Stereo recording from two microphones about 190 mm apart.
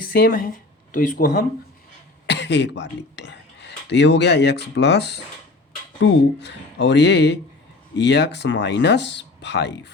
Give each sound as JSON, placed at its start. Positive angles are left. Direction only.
{"t": 0.0, "sound": "speech", "side_deg": 50}
{"t": 2.2, "sound": "speech", "side_deg": 65}